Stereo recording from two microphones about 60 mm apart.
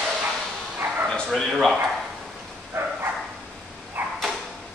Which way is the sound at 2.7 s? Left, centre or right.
Right.